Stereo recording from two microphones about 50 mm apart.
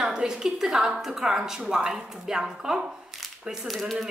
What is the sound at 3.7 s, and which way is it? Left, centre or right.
Speech, centre.